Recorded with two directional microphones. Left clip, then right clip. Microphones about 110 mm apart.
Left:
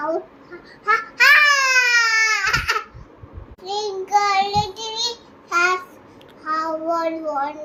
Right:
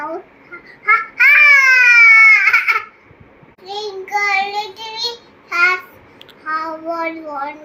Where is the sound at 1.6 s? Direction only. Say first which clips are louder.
Right 8 dB; 15° right (ahead or behind).